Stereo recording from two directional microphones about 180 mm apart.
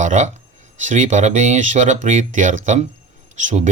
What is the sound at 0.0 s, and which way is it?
Speech, 45° right (ahead or behind).